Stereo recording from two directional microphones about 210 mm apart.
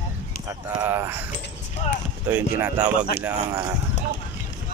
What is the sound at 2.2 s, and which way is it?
Speech, 10° right (ahead or behind).